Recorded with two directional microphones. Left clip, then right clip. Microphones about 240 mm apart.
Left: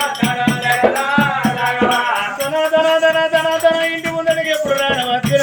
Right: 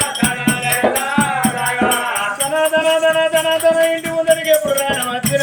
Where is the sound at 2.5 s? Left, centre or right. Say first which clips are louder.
Left 1 dB; centre.